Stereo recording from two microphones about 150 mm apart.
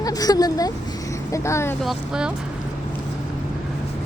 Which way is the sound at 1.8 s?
5° right (ahead or behind).